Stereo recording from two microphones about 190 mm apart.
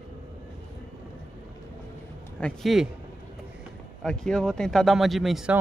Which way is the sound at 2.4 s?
Centre (ahead or behind).